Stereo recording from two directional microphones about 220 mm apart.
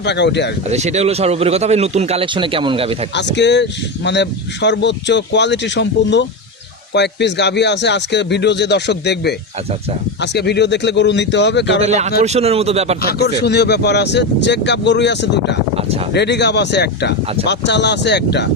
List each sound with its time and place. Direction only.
0.0 s speech: 50° left (ahead or behind)
0.7 s speech: 30° right (ahead or behind)
3.2 s speech: 50° left (ahead or behind)
11.8 s speech: 30° right (ahead or behind)
13.0 s speech: 45° left (ahead or behind)